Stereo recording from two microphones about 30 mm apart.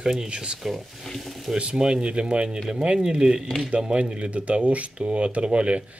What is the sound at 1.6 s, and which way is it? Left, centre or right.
Speech, right.